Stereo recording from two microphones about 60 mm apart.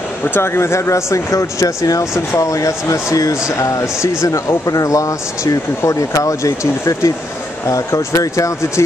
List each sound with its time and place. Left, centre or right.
0.2 s speech: left